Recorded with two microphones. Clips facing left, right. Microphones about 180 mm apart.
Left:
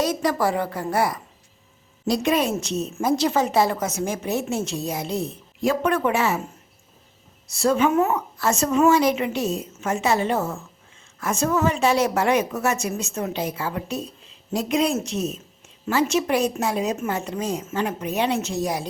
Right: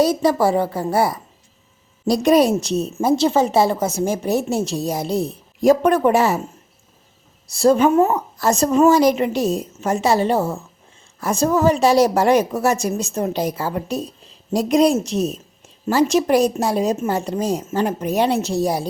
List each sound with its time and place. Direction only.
0.0 s a woman's voice: 30° right (ahead or behind)
7.5 s a woman's voice: 35° right (ahead or behind)